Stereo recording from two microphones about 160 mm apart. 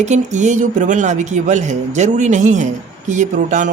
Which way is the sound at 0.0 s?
45° right (ahead or behind).